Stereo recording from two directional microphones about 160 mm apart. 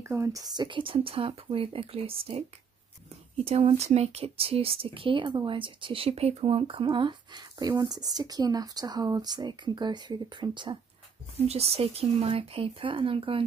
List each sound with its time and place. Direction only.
0.0 s speech: 20° right (ahead or behind); by 2.4 s 35° right (ahead or behind)
3.4 s speech: 40° right (ahead or behind)
11.4 s speech: 40° right (ahead or behind)